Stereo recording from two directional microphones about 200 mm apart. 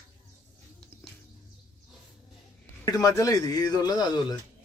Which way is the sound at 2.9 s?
15° left (ahead or behind).